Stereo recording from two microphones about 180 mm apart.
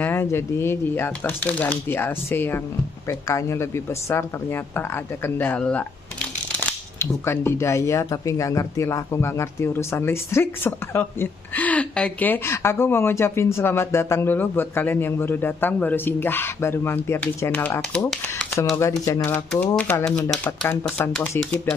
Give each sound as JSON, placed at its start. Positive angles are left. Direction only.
{"t": 0.0, "sound": "speech", "side_deg": 10}
{"t": 18.1, "sound": "crumpling", "side_deg": 5}
{"t": 18.8, "sound": "speech", "side_deg": 15}